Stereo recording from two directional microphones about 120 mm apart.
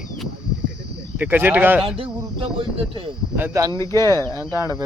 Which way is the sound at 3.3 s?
15° right (ahead or behind).